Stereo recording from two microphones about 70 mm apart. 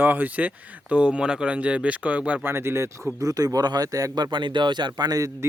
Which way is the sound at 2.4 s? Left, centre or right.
Right.